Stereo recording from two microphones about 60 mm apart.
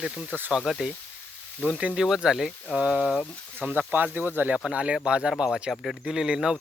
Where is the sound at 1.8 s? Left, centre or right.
Centre.